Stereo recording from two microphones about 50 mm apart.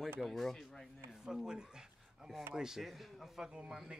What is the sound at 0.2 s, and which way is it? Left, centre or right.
Speech, centre.